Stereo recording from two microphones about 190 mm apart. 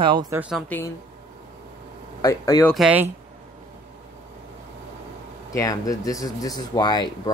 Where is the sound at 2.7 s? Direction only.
5° right (ahead or behind).